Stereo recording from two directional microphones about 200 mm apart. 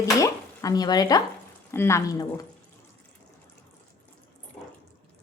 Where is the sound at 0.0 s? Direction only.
15° left (ahead or behind).